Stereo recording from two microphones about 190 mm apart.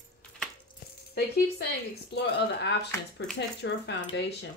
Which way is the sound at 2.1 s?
60° left (ahead or behind).